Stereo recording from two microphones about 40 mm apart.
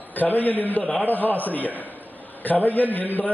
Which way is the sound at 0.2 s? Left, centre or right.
Left.